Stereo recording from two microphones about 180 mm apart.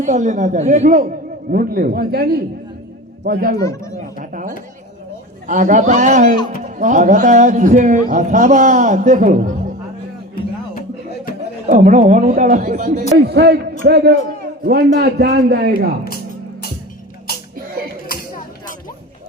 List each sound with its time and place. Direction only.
0.0 s a man's voice: 45° right (ahead or behind)
3.6 s speech: 15° left (ahead or behind)
4.2 s a sound: 45° right (ahead or behind)
5.5 s a man's voice: 45° right (ahead or behind)
10.8 s music: 50° left (ahead or behind)
11.6 s a man's voice: 45° right (ahead or behind)
13.1 s a man's voice: 65° right (ahead or behind)